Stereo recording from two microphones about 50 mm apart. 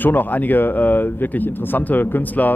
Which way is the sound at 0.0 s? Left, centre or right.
Left.